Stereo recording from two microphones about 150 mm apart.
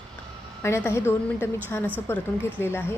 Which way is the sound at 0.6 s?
15° left (ahead or behind).